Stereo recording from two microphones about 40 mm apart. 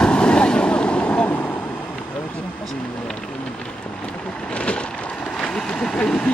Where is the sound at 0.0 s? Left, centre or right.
Left.